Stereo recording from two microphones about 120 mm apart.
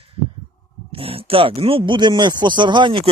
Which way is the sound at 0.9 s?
50° right (ahead or behind).